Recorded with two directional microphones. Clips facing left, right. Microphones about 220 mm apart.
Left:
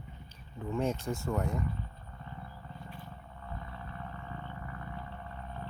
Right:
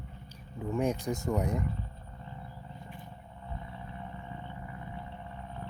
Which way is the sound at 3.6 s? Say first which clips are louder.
Right 1 dB; 15° right (ahead or behind).